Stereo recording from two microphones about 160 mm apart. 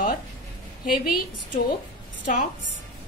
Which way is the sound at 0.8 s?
70° left (ahead or behind).